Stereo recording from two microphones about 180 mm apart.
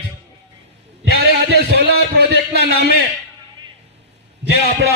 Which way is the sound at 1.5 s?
65° right (ahead or behind).